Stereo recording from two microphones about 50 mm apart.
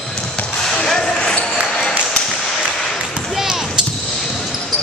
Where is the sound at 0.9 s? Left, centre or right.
Centre.